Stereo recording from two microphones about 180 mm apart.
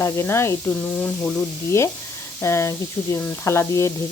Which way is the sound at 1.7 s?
15° left (ahead or behind).